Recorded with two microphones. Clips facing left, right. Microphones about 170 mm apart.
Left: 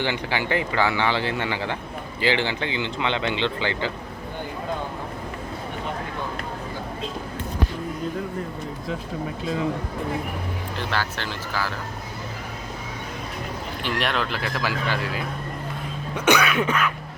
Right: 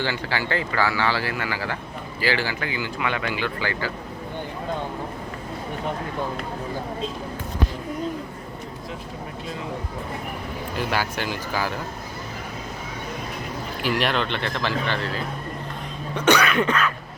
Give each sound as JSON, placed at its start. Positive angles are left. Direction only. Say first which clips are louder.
{"t": 0.0, "sound": "speech", "louder": "left 1 dB", "side_deg": 20}
{"t": 10.8, "sound": "speech", "louder": "right 3 dB", "side_deg": -10}
{"t": 13.8, "sound": "speech", "louder": "right 3 dB", "side_deg": 0}
{"t": 16.1, "sound": "cough", "louder": "right 1 dB", "side_deg": 10}